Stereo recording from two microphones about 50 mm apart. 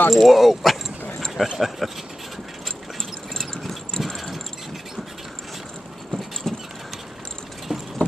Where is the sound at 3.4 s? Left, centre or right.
Centre.